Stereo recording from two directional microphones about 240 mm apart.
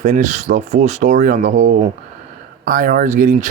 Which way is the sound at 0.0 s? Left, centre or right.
Right.